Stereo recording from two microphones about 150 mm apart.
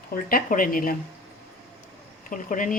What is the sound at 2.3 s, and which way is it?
Speech, 60° left (ahead or behind).